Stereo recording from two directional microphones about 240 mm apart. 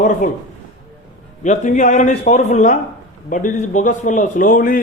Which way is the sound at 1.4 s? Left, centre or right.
Left.